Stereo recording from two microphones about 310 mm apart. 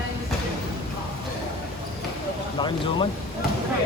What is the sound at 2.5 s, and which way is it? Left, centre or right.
Speech, centre.